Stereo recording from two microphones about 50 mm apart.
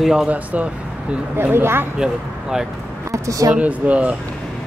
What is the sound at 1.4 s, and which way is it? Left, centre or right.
Speech, right.